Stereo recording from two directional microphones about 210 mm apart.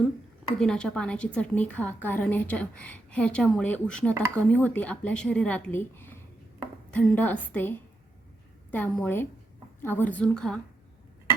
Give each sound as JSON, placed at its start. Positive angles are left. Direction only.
{"t": 0.6, "sound": "a woman's voice", "side_deg": 5}
{"t": 6.6, "sound": "a sound", "side_deg": 5}
{"t": 7.5, "sound": "a woman's voice", "side_deg": 10}